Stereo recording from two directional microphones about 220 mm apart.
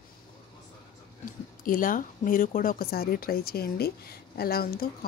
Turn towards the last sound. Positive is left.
turn(degrees=45)  # may be behind; listen again after turning